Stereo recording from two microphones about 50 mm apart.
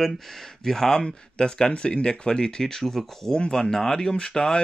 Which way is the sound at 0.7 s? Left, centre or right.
Centre.